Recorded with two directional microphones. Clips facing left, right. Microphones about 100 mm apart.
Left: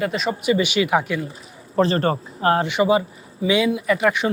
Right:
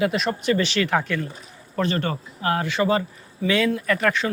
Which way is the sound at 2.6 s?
15° left (ahead or behind).